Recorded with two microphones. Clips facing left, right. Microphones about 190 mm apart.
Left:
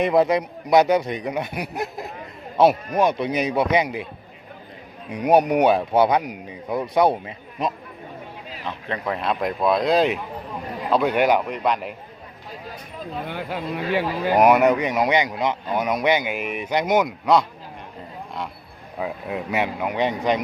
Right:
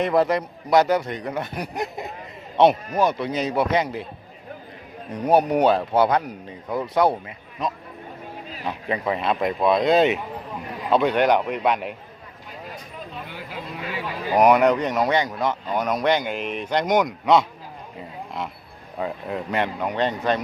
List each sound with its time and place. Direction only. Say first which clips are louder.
0.0 s speech: left 2 dB; 15° left (ahead or behind)
2.9 s speech: left 2 dB; 20° left (ahead or behind)
5.1 s speech: left 2 dB; 10° left (ahead or behind)
8.6 s speech: right 2 dB; 5° right (ahead or behind)
13.2 s speech: left 7 dB; 65° left (ahead or behind)
14.3 s speech: even; 5° left (ahead or behind)
18.9 s speech: even; 5° left (ahead or behind)